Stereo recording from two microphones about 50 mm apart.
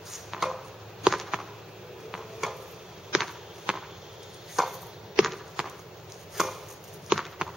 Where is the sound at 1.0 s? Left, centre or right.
Centre.